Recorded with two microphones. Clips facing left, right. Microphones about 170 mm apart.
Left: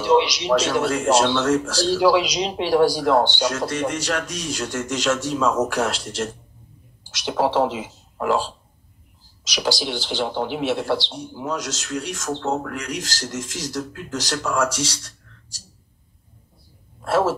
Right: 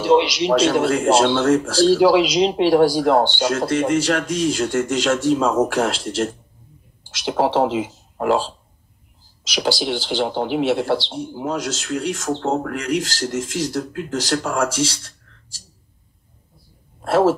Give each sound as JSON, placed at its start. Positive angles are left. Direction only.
{"t": 0.0, "sound": "a man's voice", "side_deg": -30}
{"t": 9.5, "sound": "a man's voice", "side_deg": -30}
{"t": 17.0, "sound": "speech", "side_deg": -30}